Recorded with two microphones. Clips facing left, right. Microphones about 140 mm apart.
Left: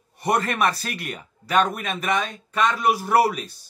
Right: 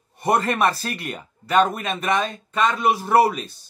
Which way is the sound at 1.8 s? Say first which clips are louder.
Right 2 dB; centre (ahead or behind).